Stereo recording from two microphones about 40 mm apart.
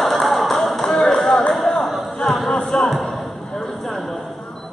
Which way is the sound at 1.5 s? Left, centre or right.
Centre.